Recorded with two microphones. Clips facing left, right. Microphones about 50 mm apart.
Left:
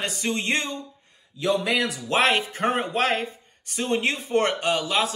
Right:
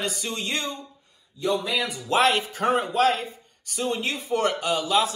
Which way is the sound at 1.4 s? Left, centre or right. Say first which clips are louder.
Left 2 dB; left.